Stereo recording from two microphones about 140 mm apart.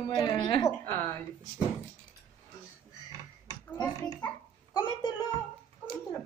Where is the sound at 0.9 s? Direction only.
10° left (ahead or behind).